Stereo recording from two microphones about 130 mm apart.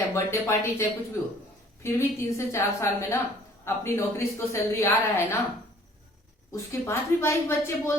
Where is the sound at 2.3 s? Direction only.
20° left (ahead or behind).